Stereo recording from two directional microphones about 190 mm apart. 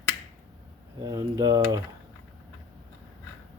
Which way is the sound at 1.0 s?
20° right (ahead or behind).